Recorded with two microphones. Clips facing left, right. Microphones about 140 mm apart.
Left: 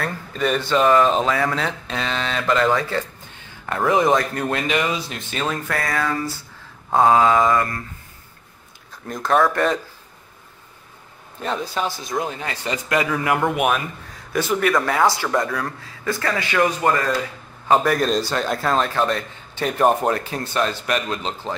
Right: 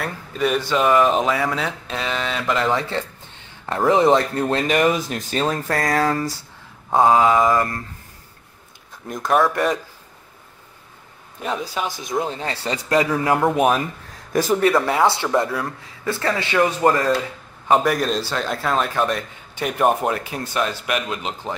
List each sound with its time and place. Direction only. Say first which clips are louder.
0.0 s speech: right 1 dB; 5° right (ahead or behind); by 4.6 s 25° right (ahead or behind)
4.6 s speech: right 4 dB; 45° right (ahead or behind)
7.0 s speech: even; 20° right (ahead or behind)
9.3 s speech: even; 10° right (ahead or behind)
11.4 s speech: left 1 dB; 10° right (ahead or behind)
12.1 s speech: right 2 dB; 25° right (ahead or behind)
14.8 s speech: right 1 dB; 20° right (ahead or behind)
17.6 s speech: even; 10° right (ahead or behind)